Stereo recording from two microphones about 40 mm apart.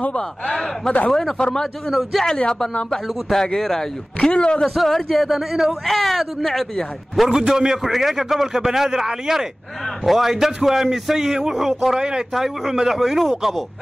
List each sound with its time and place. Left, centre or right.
0.8 s speech: centre
1.9 s speech: centre
2.3 s speech: left
2.9 s speech: centre
4.3 s speech: left
4.6 s speech: centre
5.9 s speech: centre
7.2 s a man's voice: centre
12.4 s a man's voice: centre